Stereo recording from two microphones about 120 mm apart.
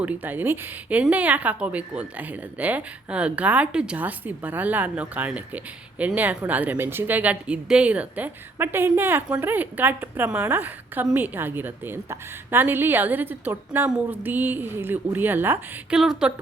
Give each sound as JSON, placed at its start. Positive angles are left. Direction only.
{"t": 0.0, "sound": "speech", "side_deg": -15}
{"t": 16.0, "sound": "speech", "side_deg": -5}